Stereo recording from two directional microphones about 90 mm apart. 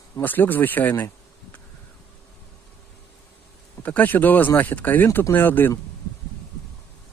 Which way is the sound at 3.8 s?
15° left (ahead or behind).